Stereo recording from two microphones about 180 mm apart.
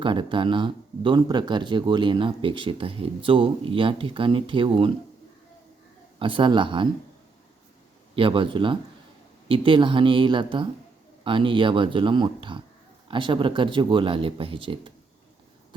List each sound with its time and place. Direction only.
0.0 s speech: 25° right (ahead or behind)
6.1 s speech: 30° right (ahead or behind)
8.1 s speech: 30° right (ahead or behind)